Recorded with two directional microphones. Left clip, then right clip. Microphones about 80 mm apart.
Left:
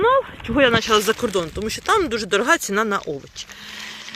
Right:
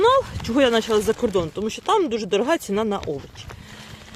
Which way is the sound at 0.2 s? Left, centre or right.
Right.